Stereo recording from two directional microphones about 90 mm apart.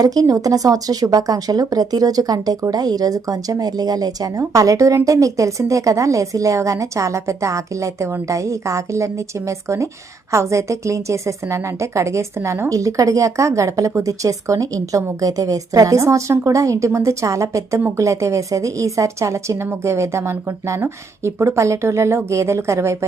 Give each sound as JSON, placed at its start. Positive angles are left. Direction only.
{"t": 0.0, "sound": "speech", "side_deg": -45}